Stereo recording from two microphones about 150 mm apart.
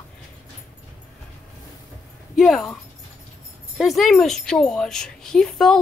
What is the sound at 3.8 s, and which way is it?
Speech, centre (ahead or behind).